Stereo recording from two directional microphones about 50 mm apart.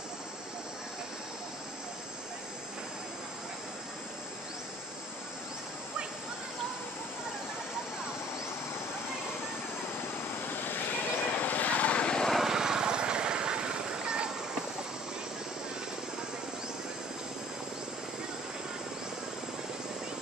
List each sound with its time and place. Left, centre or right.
10.4 s vehicle: left; by 12.3 s centre
12.3 s vehicle: centre